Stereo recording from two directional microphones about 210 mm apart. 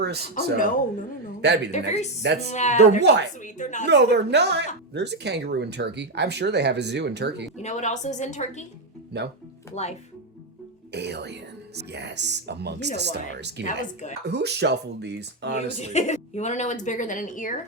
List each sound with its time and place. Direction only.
0.0 s a woman's voice: 50° right (ahead or behind)
1.7 s a woman's voice: 30° left (ahead or behind)
3.0 s speech: 55° right (ahead or behind)
3.4 s a woman's voice: 35° left (ahead or behind)
3.8 s speech: 55° right (ahead or behind)
7.6 s a woman's voice: 35° left (ahead or behind)
9.1 s speech: 50° right (ahead or behind)
10.9 s speech: 55° right (ahead or behind)
13.7 s a woman's voice: 35° left (ahead or behind)
14.3 s speech: 50° right (ahead or behind)
15.8 s a woman's voice: 30° left (ahead or behind)